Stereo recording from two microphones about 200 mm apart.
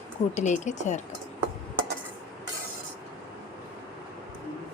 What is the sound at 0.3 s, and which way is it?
Speech, 35° left (ahead or behind).